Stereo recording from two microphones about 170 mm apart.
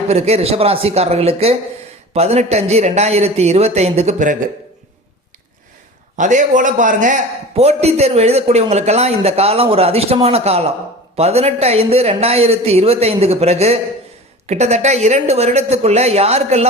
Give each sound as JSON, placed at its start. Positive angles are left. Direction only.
{"t": 0.1, "sound": "a man's voice", "side_deg": -40}
{"t": 6.1, "sound": "a man's voice", "side_deg": -45}